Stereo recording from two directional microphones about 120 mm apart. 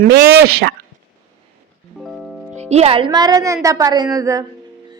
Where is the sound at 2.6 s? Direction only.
60° right (ahead or behind); by 4.4 s 30° right (ahead or behind).